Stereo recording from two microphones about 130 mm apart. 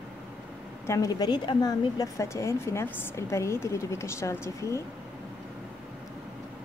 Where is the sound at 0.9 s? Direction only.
25° left (ahead or behind).